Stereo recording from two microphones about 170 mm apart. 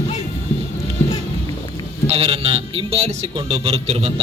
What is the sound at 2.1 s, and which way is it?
Speech, 35° right (ahead or behind).